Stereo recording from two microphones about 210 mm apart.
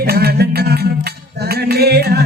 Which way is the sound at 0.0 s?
50° right (ahead or behind).